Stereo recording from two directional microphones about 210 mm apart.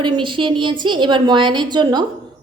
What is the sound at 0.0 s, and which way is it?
A woman's voice, 20° right (ahead or behind).